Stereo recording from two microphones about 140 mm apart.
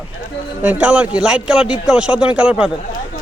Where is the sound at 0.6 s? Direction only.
10° right (ahead or behind).